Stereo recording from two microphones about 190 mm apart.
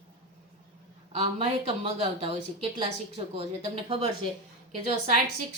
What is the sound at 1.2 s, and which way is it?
A woman's voice, 35° right (ahead or behind).